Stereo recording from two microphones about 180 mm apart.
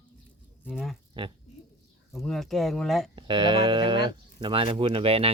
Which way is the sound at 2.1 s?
Centre (ahead or behind).